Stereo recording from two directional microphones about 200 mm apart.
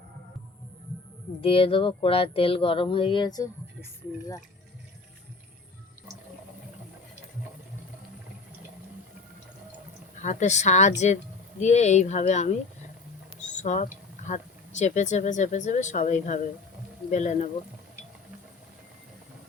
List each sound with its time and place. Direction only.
1.4 s speech: 25° left (ahead or behind)
10.2 s speech: 35° left (ahead or behind)
13.6 s speech: 35° left (ahead or behind)